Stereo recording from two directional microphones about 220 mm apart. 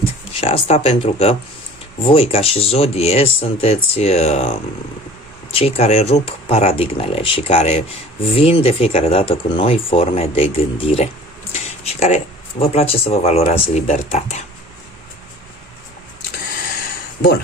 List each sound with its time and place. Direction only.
0.3 s speech: 25° left (ahead or behind)
5.5 s speech: 30° left (ahead or behind)